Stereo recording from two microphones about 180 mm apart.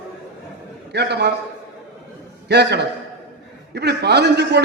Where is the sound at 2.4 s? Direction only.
65° right (ahead or behind).